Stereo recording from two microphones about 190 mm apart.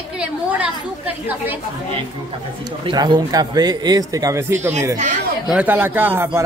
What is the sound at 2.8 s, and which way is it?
A man's voice, 25° right (ahead or behind).